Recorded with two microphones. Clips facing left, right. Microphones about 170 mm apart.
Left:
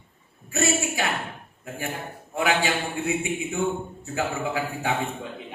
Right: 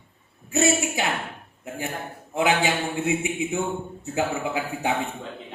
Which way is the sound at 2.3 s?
20° right (ahead or behind).